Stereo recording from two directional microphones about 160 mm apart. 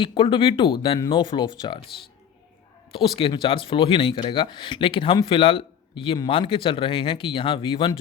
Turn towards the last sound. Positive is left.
turn(degrees=30)  # may be behind; listen again after turning